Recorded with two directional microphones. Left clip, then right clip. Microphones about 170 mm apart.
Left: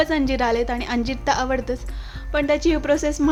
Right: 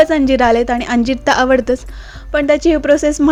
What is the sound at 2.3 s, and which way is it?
Speech, 30° right (ahead or behind).